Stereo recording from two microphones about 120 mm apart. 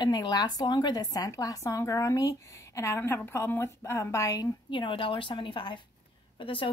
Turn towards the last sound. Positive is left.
turn(degrees=45)  # may be behind; listen again after turning